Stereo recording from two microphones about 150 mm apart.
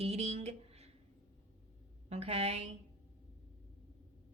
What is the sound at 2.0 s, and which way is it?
Speech, 45° right (ahead or behind).